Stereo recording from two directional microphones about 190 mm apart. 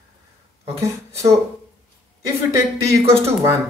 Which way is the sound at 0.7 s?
15° right (ahead or behind).